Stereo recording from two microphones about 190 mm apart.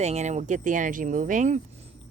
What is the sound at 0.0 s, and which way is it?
Speech, 35° right (ahead or behind).